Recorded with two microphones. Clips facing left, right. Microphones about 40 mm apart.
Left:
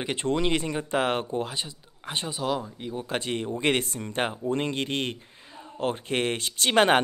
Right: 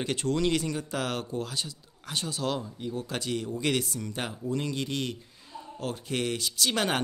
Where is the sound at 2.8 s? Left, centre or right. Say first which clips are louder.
Left 3 dB; left.